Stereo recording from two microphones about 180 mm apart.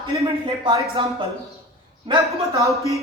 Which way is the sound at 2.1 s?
20° right (ahead or behind).